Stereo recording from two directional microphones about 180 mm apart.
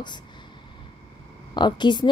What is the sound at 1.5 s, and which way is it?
Speech, 25° left (ahead or behind).